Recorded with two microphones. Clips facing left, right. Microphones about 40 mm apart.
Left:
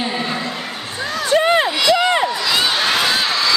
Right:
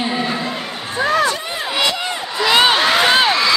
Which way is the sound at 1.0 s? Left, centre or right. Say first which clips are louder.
Right 8 dB; right.